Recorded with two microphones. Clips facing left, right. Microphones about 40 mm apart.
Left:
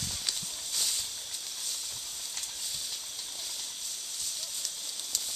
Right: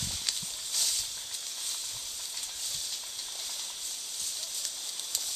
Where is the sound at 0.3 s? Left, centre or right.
Centre.